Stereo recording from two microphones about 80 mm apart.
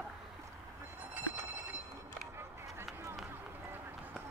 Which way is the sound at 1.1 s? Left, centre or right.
Right.